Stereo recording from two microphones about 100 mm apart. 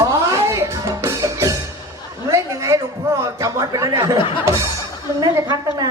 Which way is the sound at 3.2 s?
30° right (ahead or behind).